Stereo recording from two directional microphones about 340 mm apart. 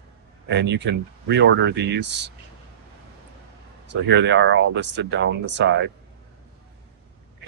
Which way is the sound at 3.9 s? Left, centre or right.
Right.